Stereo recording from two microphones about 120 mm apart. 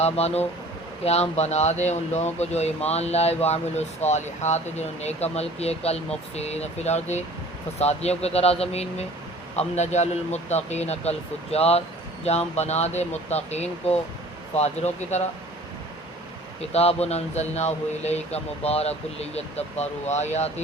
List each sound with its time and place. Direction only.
0.0 s speech: 60° left (ahead or behind)
9.6 s speech: 70° left (ahead or behind)
16.6 s speech: 60° left (ahead or behind)